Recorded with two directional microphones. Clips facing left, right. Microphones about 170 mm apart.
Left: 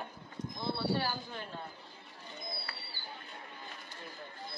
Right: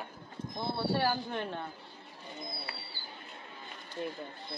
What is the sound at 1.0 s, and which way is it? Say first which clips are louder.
Speech: right 6 dB; 65° right (ahead or behind).